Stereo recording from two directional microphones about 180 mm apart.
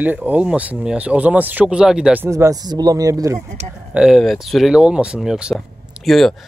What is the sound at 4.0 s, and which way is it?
Speech, centre (ahead or behind).